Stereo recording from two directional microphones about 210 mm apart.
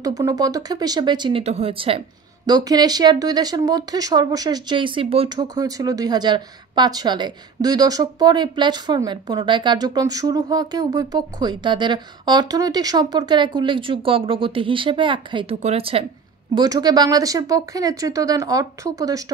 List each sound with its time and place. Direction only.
0.0 s speech: 15° right (ahead or behind)